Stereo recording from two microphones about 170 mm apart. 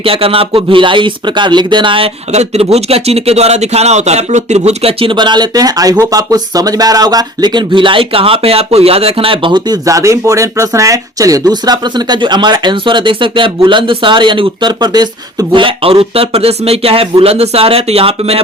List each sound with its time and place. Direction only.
0.0 s speech: 35° right (ahead or behind)